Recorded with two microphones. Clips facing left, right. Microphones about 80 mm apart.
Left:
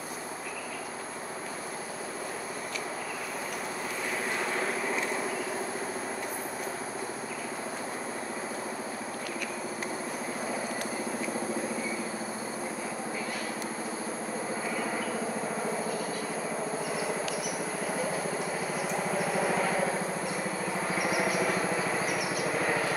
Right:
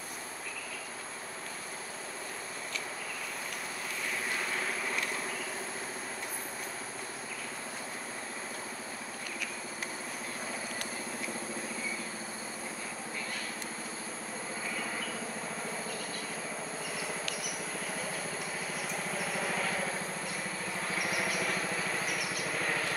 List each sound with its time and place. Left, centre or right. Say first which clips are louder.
4.4 s vehicle: left 5 dB; centre
14.8 s train: left 6 dB; centre
16.9 s cricket: left 6 dB; centre
17.8 s vehicle: left 7 dB; centre
20.7 s a sound: left 5 dB; centre